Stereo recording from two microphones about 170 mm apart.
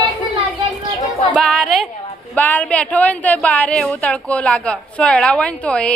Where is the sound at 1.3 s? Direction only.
5° left (ahead or behind).